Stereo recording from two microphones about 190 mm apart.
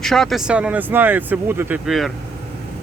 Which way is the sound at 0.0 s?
Centre (ahead or behind).